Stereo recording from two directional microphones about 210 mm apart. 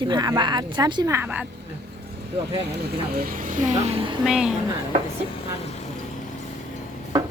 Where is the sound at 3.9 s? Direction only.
25° right (ahead or behind).